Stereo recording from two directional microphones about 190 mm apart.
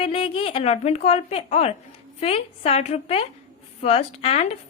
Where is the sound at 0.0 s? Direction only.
30° left (ahead or behind).